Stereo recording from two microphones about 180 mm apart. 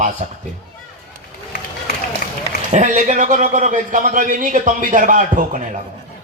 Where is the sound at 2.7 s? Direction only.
40° right (ahead or behind).